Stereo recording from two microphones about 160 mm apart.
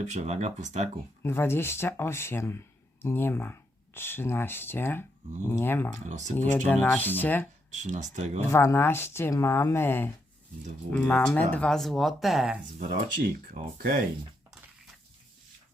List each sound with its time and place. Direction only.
0.0 s speech: 50° right (ahead or behind)
1.2 s speech: 15° left (ahead or behind)
6.1 s speech: 50° right (ahead or behind)
6.3 s speech: 10° left (ahead or behind)
7.7 s speech: 50° right (ahead or behind)
8.5 s speech: 15° left (ahead or behind); by 12.5 s centre (ahead or behind)
13.2 s speech: 65° right (ahead or behind)